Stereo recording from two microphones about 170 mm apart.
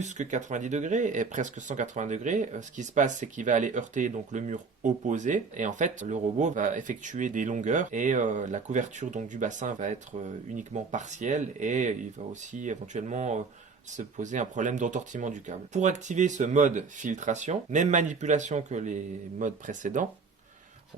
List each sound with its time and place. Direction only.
0.0 s speech: 45° right (ahead or behind)